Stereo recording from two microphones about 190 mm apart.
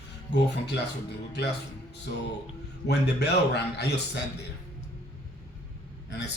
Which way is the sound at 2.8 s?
60° left (ahead or behind).